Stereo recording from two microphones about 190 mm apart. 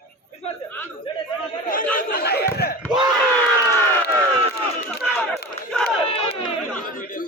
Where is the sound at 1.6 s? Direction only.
45° left (ahead or behind).